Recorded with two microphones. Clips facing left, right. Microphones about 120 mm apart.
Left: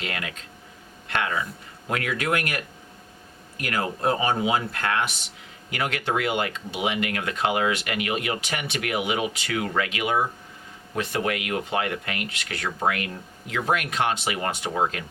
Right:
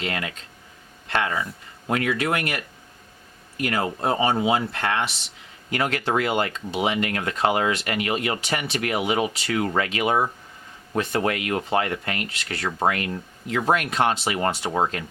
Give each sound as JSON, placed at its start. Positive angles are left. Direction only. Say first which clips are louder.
{"t": 0.0, "sound": "speech", "louder": "right 3 dB", "side_deg": -30}
{"t": 3.6, "sound": "speech", "louder": "right 2 dB", "side_deg": -30}